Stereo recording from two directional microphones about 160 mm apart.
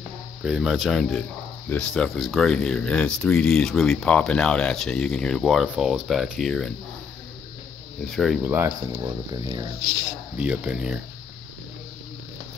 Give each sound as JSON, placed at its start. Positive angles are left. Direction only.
{"t": 0.4, "sound": "speech", "side_deg": -5}
{"t": 8.0, "sound": "speech", "side_deg": 0}
{"t": 8.5, "sound": "speech", "side_deg": -15}
{"t": 10.3, "sound": "speech", "side_deg": -5}